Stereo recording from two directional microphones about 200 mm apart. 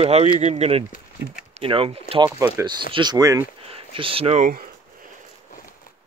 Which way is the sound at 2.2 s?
10° right (ahead or behind).